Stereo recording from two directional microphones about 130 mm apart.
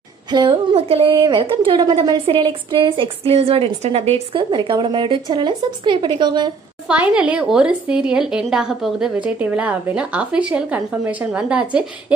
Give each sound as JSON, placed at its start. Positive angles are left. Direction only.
{"t": 0.3, "sound": "a woman's voice", "side_deg": -35}
{"t": 1.1, "sound": "a woman's voice", "side_deg": -35}
{"t": 6.9, "sound": "a woman's voice", "side_deg": -10}